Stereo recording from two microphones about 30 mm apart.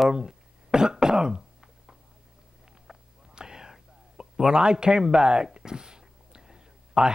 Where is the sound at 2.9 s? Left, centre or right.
Centre.